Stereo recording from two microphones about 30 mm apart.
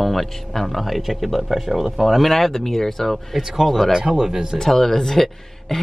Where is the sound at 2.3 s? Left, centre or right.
Centre.